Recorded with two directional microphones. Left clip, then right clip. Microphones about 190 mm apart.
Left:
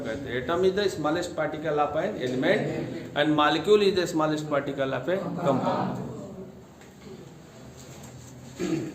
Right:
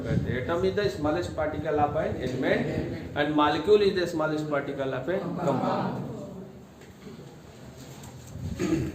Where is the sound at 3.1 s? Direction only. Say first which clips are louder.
Left 2 dB; 50° left (ahead or behind).